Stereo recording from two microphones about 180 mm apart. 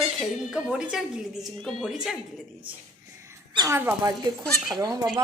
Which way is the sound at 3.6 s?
15° right (ahead or behind).